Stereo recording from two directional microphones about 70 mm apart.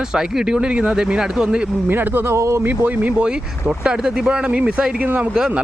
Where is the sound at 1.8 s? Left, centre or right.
Right.